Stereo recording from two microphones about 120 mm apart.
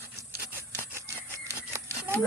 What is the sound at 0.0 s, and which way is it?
Rub, 25° right (ahead or behind).